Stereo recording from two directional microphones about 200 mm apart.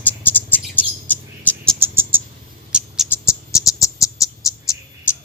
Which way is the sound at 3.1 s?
15° left (ahead or behind).